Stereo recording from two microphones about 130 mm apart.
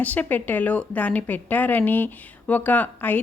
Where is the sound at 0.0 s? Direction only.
10° left (ahead or behind).